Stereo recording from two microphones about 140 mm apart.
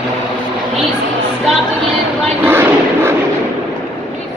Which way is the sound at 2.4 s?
15° right (ahead or behind).